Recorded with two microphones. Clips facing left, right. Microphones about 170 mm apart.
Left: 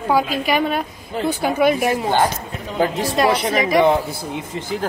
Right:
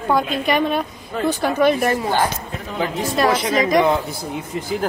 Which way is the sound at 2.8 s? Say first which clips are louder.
Left 3 dB; 35° left (ahead or behind).